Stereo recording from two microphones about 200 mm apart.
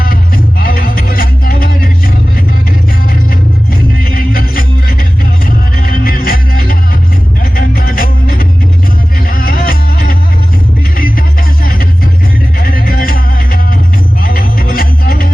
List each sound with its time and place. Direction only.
0.6 s music: 50° left (ahead or behind)
4.1 s music: 45° left (ahead or behind)
12.5 s music: 45° left (ahead or behind)